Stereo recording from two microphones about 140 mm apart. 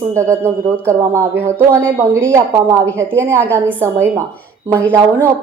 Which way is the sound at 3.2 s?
10° left (ahead or behind).